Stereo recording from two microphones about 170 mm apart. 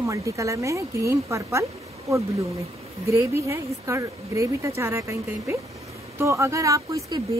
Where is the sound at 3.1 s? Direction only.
15° right (ahead or behind).